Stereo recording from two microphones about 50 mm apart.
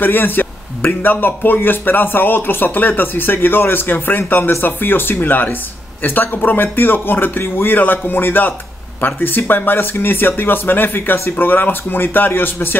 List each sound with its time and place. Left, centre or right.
0.0 s speech: left